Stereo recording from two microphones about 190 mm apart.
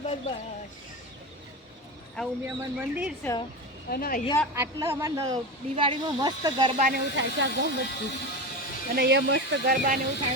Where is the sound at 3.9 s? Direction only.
55° left (ahead or behind).